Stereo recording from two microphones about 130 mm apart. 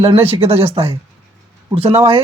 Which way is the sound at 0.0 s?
50° right (ahead or behind).